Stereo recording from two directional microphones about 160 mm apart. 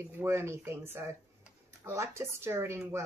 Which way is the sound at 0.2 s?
15° right (ahead or behind).